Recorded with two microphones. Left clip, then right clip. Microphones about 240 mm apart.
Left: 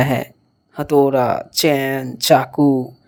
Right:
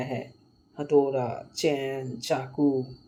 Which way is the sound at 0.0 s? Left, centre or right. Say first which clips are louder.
Left 15 dB; left.